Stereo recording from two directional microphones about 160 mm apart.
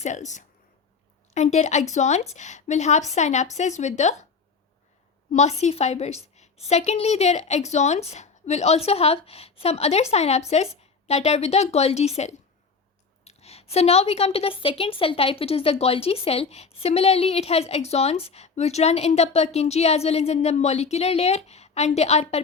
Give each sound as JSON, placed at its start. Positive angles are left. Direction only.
{"t": 0.0, "sound": "a woman's voice", "side_deg": 50}
{"t": 5.3, "sound": "a woman's voice", "side_deg": 45}